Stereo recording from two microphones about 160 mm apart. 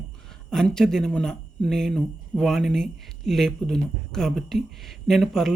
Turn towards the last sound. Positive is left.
turn(degrees=0)  # may be behind; listen again after turning